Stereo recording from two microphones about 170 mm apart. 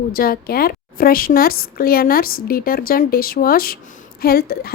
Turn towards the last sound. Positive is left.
turn(degrees=65)  # may be behind; listen again after turning